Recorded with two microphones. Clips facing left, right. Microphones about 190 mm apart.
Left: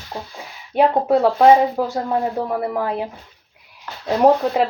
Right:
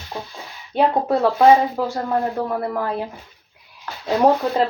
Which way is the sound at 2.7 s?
15° left (ahead or behind).